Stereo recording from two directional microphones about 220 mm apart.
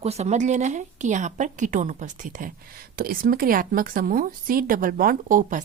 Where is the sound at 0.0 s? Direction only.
30° right (ahead or behind).